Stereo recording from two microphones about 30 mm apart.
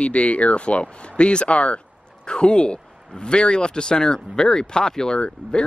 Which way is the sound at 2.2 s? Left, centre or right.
Left.